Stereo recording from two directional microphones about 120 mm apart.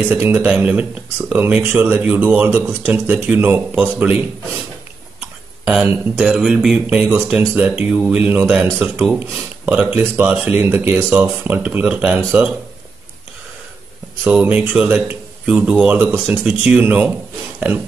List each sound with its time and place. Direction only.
0.0 s speech: 10° right (ahead or behind)
5.7 s speech: 10° right (ahead or behind)
14.2 s speech: 10° right (ahead or behind)